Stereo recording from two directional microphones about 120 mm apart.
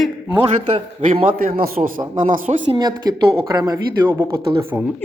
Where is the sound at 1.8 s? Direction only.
90° right.